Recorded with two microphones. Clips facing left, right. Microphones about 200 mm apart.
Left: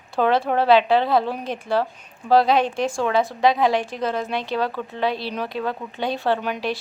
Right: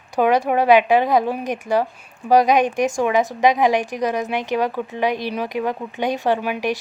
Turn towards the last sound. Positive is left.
turn(degrees=-10)  # may be behind; listen again after turning